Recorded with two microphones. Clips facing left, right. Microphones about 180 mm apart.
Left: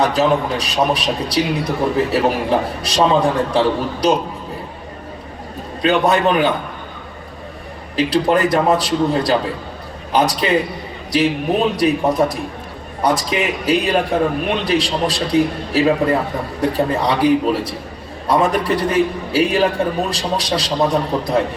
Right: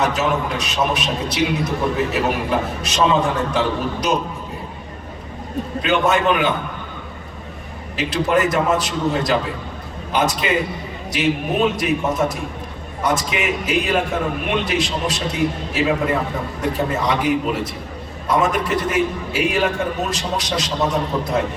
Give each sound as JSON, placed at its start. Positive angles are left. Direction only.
{"t": 0.0, "sound": "a man's voice", "side_deg": 35}
{"t": 5.8, "sound": "a man's voice", "side_deg": 35}
{"t": 7.9, "sound": "a man's voice", "side_deg": 35}